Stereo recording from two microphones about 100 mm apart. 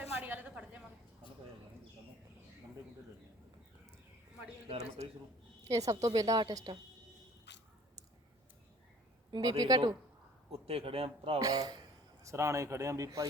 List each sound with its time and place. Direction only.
0.2 s a sound: 15° right (ahead or behind)
4.7 s a man's voice: 90° right
5.6 s a woman's voice: 35° right (ahead or behind)
9.3 s speech: 45° right (ahead or behind)
10.5 s a man's voice: 80° right
11.3 s a woman's voice: 40° right (ahead or behind)